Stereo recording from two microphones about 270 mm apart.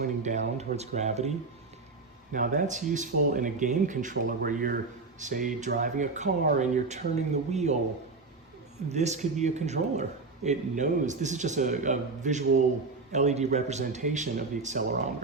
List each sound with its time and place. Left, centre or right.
0.0 s a man's voice: right
2.3 s a man's voice: right
8.9 s a man's voice: right